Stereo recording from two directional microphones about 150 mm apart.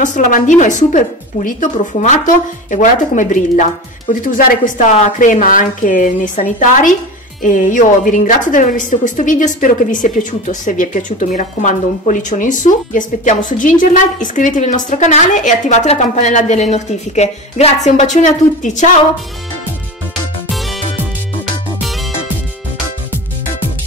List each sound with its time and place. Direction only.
0.0 s a woman's voice: 55° left (ahead or behind)
20.5 s music: centre (ahead or behind)